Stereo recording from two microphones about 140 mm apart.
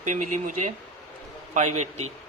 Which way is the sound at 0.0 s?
60° right (ahead or behind).